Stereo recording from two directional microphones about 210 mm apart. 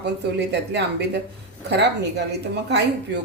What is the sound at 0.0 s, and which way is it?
A woman's voice, 55° right (ahead or behind).